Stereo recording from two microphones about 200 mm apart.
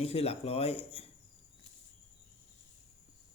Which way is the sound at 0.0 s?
30° left (ahead or behind).